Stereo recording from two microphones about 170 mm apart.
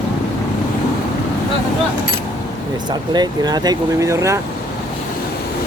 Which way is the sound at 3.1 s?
25° right (ahead or behind).